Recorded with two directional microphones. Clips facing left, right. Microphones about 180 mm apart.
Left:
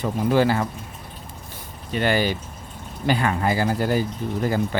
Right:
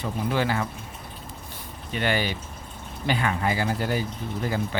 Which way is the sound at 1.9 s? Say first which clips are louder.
Left 5 dB; 40° left (ahead or behind).